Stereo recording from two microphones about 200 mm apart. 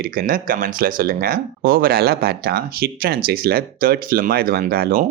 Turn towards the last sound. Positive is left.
turn(degrees=-50)  # may be behind; listen again after turning